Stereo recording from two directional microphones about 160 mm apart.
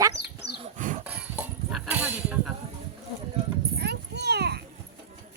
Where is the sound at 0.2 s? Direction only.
90° left.